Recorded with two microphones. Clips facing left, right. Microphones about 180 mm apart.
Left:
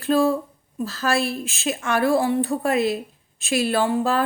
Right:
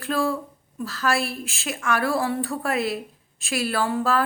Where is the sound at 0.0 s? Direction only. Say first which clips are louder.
Left 5 dB; 25° left (ahead or behind).